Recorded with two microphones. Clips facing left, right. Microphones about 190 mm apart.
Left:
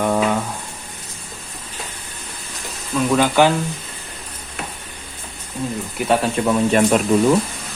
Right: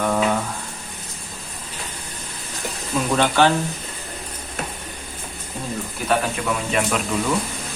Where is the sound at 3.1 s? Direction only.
10° left (ahead or behind).